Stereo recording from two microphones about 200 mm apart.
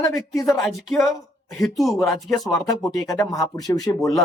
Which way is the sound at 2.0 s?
Centre (ahead or behind).